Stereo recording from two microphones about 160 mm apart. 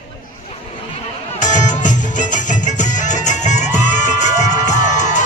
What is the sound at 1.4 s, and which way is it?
Music, 50° left (ahead or behind).